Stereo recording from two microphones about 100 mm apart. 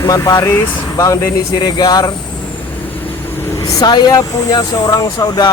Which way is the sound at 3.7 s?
40° left (ahead or behind).